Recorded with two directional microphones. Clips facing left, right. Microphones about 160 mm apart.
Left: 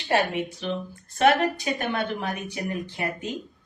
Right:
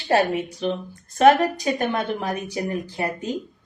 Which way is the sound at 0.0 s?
40° right (ahead or behind).